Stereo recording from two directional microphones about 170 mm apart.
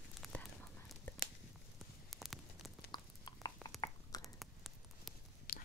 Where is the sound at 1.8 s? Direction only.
Centre (ahead or behind).